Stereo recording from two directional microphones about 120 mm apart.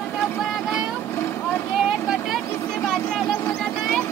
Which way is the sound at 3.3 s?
25° left (ahead or behind).